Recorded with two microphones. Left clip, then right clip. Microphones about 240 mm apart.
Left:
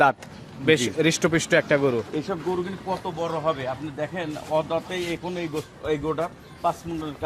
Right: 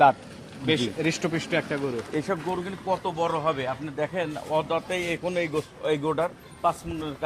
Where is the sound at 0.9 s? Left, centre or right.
Centre; by 1.9 s left.